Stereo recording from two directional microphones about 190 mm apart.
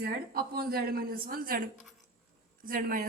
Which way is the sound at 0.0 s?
50° right (ahead or behind).